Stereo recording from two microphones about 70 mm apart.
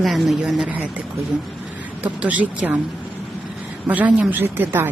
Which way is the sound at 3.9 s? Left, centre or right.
Right.